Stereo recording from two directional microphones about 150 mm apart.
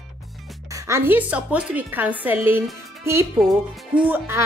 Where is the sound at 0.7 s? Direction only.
20° right (ahead or behind).